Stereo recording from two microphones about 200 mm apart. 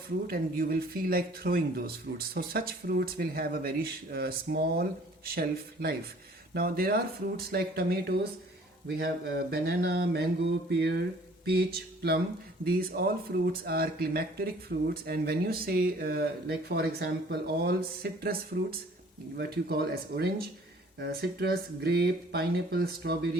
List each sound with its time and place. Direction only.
0.3 s speech: 45° right (ahead or behind)
19.4 s speech: 50° right (ahead or behind)